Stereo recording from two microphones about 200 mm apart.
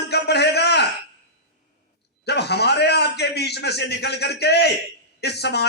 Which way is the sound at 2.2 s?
55° left (ahead or behind).